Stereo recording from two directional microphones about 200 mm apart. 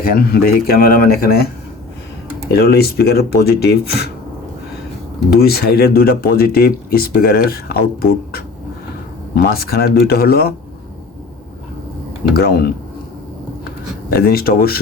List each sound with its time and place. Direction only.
0.0 s speech: 45° left (ahead or behind)
2.5 s speech: 50° left (ahead or behind)
5.3 s speech: 50° left (ahead or behind)
12.3 s speech: 50° left (ahead or behind)
14.1 s speech: 50° left (ahead or behind)